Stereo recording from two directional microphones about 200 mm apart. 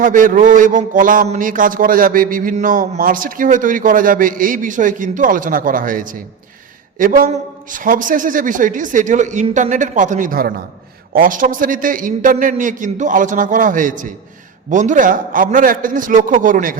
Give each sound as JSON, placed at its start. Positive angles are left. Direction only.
{"t": 0.0, "sound": "a man's voice", "side_deg": -40}